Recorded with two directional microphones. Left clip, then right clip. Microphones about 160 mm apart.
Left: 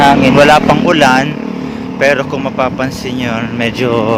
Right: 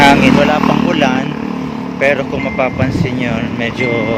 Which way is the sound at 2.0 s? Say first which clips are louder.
Left 2 dB; 25° left (ahead or behind).